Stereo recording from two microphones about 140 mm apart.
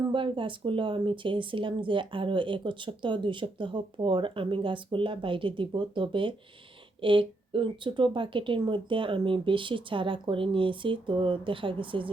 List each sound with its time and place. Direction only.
0.0 s speech: 35° right (ahead or behind)